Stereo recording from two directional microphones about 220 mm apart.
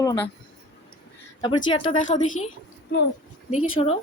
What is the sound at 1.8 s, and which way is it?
Speech, 30° left (ahead or behind).